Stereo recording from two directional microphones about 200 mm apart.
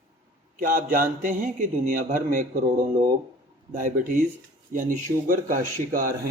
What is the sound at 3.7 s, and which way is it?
Speech, 40° right (ahead or behind).